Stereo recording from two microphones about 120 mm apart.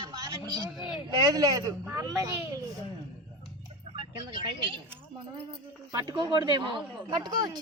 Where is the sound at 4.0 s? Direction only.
45° right (ahead or behind).